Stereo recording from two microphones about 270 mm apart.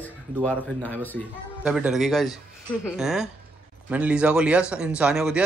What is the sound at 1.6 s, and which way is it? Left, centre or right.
A man's voice, centre.